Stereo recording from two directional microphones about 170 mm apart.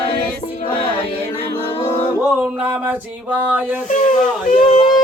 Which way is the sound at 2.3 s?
10° right (ahead or behind).